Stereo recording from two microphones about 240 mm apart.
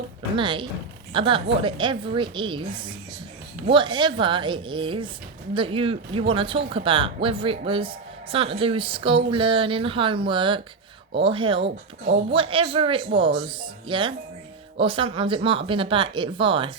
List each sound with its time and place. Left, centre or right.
0.3 s speech: centre